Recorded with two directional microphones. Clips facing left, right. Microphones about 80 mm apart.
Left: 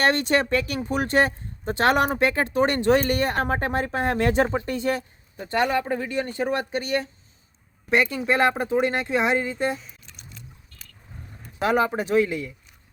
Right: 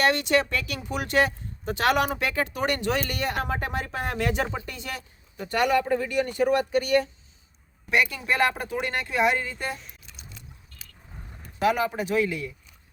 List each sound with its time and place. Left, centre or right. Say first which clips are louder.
0.0 s speech: left 1 dB; left
9.7 s a sound: left 4 dB; centre
11.6 s speech: left 2 dB; left